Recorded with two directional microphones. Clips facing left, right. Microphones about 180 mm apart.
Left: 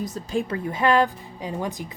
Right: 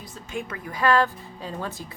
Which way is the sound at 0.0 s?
40° left (ahead or behind).